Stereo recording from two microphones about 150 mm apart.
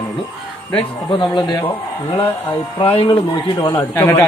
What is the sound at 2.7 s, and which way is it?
Speech, 40° left (ahead or behind).